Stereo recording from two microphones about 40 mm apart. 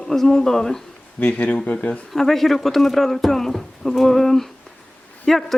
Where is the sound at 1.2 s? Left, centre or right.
Left.